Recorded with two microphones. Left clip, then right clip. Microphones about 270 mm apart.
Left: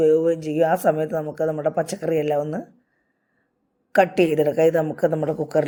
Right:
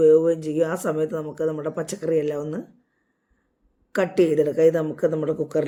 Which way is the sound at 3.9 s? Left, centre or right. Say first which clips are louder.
Left 2 dB; centre.